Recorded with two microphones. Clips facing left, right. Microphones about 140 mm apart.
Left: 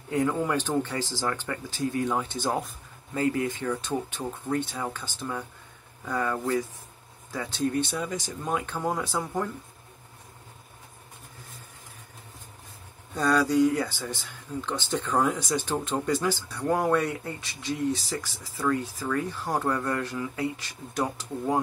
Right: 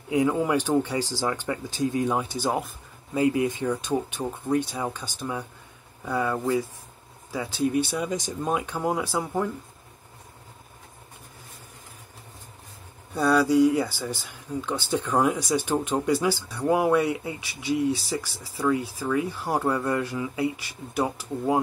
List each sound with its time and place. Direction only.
0.1 s speech: 10° right (ahead or behind)
13.1 s speech: 10° right (ahead or behind)